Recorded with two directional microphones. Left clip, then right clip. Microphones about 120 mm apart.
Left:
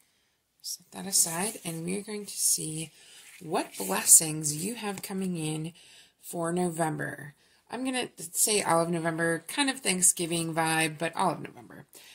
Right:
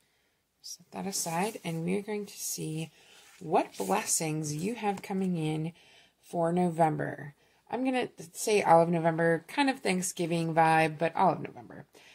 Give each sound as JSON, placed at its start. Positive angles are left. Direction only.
{"t": 0.7, "sound": "a woman's voice", "side_deg": -45}
{"t": 3.9, "sound": "a woman's voice", "side_deg": -40}